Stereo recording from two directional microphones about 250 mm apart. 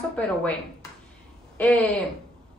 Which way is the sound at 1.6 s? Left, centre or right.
Centre.